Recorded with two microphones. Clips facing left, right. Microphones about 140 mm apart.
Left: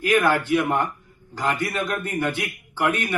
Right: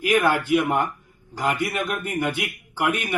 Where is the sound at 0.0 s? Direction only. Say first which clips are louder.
Even; 15° right (ahead or behind).